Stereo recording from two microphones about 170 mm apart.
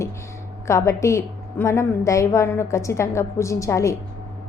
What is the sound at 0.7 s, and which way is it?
A woman's voice, 15° left (ahead or behind).